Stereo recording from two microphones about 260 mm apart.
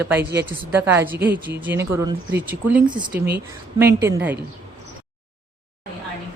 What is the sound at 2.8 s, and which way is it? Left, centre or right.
A woman's voice, centre.